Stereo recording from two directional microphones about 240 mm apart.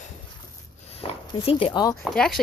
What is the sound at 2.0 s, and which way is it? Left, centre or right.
Speech, centre.